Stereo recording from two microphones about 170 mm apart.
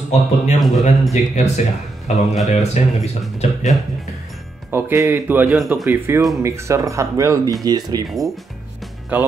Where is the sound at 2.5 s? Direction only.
40° left (ahead or behind).